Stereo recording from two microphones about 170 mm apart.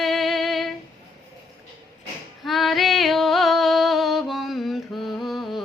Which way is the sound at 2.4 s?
Centre (ahead or behind).